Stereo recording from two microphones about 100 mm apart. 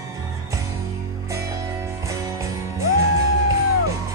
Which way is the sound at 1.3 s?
35° right (ahead or behind).